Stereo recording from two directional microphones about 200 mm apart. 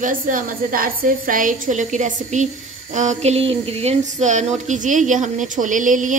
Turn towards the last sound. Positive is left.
turn(degrees=-40)  # may be behind; listen again after turning